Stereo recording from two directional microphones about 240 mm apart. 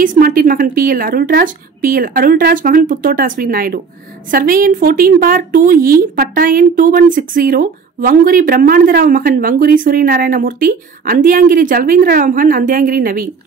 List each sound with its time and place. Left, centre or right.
0.0 s a woman's voice: right